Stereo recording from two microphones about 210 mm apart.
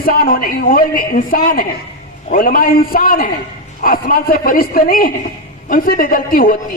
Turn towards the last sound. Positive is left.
turn(degrees=45)  # may be behind; listen again after turning